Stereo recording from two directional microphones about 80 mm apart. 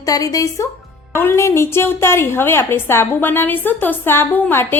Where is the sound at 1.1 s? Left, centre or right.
Left.